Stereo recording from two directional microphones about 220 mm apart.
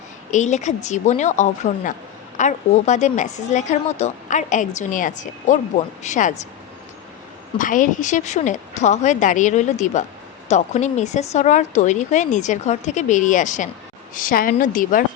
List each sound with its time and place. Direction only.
0.3 s a woman's voice: 35° left (ahead or behind)
7.6 s a woman's voice: 35° left (ahead or behind)